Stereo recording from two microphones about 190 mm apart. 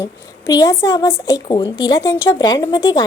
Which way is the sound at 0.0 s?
15° left (ahead or behind).